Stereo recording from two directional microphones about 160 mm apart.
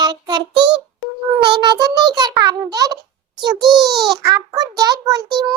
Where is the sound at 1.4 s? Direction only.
30° right (ahead or behind).